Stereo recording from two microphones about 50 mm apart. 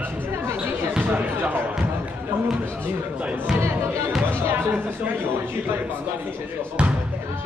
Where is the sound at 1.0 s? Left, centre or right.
Right.